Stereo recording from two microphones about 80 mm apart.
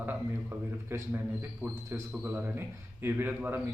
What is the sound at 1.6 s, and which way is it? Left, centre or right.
A man's voice, centre.